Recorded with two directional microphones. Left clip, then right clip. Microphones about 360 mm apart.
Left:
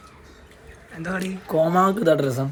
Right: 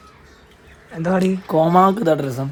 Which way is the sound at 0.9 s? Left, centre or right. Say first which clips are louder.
Right 9 dB; centre.